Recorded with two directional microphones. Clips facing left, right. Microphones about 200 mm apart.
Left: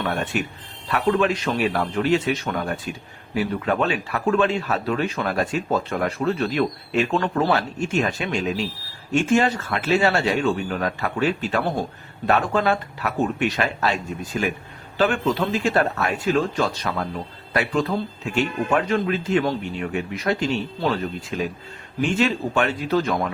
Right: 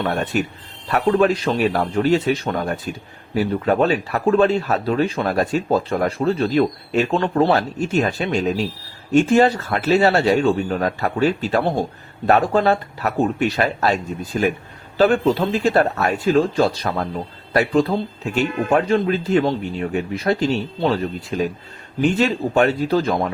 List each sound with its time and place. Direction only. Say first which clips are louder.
0.1 s speech: right 4 dB; 40° right (ahead or behind)
7.2 s a man's voice: right 4 dB; 25° right (ahead or behind)
7.5 s speech: right 3 dB; 35° right (ahead or behind)